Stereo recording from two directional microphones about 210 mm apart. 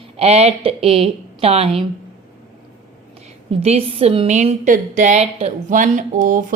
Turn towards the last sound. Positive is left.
turn(degrees=-40)  # may be behind; listen again after turning